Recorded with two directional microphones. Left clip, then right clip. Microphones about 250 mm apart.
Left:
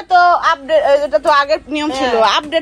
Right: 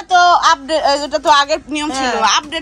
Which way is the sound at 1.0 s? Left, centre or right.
Centre.